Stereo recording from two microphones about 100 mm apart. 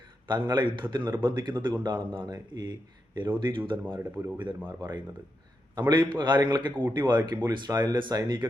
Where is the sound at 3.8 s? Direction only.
25° right (ahead or behind).